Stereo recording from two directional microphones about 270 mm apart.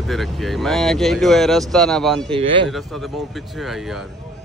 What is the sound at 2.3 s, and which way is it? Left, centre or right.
Speech, centre.